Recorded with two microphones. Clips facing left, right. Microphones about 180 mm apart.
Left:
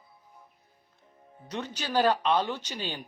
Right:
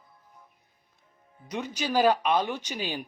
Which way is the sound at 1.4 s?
10° right (ahead or behind).